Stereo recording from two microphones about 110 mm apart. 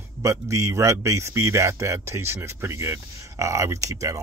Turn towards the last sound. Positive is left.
turn(degrees=-30)  # may be behind; listen again after turning